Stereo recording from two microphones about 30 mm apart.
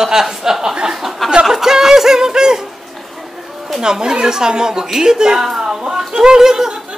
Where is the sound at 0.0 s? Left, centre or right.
Centre.